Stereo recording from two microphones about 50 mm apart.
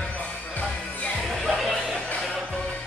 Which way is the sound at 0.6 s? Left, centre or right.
Left.